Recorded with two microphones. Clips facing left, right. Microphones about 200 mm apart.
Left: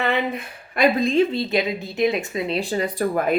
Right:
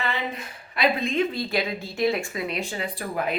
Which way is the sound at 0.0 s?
60° left (ahead or behind).